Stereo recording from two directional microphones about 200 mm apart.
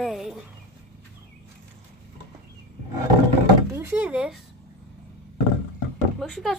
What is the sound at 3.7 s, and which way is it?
Speech, 10° right (ahead or behind).